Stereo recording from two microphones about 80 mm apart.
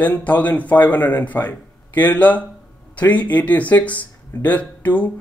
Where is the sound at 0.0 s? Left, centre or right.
Left.